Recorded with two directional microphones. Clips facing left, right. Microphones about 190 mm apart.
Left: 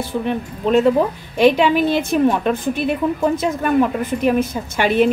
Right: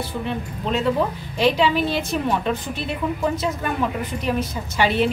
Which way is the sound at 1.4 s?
55° left (ahead or behind).